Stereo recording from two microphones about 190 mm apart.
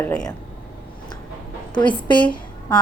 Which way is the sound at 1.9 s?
25° left (ahead or behind).